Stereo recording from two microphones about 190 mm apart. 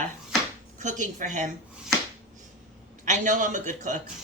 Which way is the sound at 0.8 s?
40° right (ahead or behind).